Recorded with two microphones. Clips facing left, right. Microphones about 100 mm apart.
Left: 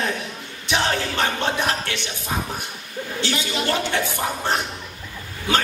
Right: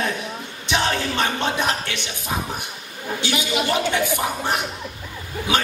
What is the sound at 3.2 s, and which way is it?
A woman's voice, 15° right (ahead or behind).